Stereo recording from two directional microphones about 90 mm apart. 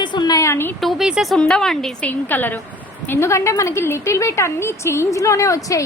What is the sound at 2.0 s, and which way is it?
A woman's voice, 20° left (ahead or behind).